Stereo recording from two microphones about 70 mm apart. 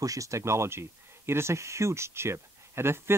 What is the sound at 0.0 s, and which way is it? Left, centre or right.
Speech, right.